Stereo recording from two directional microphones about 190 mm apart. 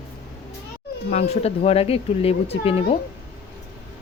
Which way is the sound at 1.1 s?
35° left (ahead or behind).